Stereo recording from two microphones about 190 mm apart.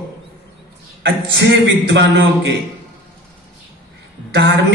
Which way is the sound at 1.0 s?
65° right (ahead or behind).